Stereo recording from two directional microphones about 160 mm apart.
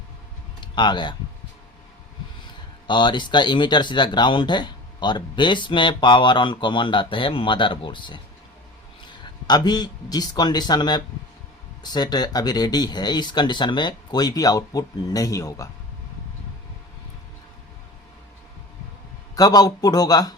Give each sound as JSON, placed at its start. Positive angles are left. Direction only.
{"t": 0.6, "sound": "speech", "side_deg": 30}
{"t": 2.8, "sound": "speech", "side_deg": 30}
{"t": 9.2, "sound": "speech", "side_deg": 25}
{"t": 19.4, "sound": "speech", "side_deg": 25}